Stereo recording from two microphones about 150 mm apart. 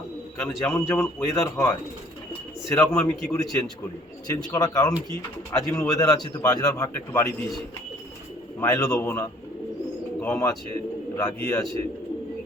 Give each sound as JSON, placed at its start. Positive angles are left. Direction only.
{"t": 0.4, "sound": "a man's voice", "side_deg": 15}
{"t": 8.6, "sound": "speech", "side_deg": 20}